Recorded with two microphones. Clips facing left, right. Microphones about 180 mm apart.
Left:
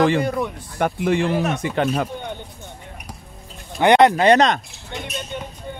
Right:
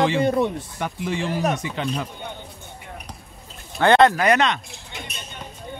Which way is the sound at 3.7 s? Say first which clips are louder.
Left 2 dB; 15° left (ahead or behind).